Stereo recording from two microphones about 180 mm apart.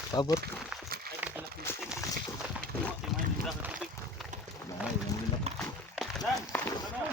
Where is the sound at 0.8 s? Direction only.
55° right (ahead or behind).